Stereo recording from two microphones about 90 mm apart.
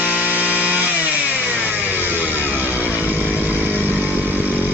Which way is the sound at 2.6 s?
20° right (ahead or behind).